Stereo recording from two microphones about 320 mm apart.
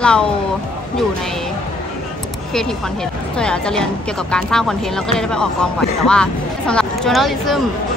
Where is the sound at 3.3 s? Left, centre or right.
Centre.